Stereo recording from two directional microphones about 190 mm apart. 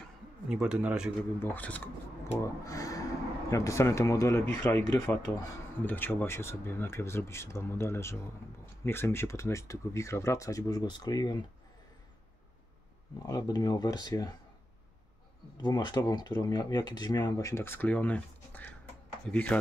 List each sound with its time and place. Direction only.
0.5 s speech: 5° right (ahead or behind)
1.4 s speech: 10° left (ahead or behind)
13.3 s speech: 20° left (ahead or behind)
15.6 s speech: 20° left (ahead or behind)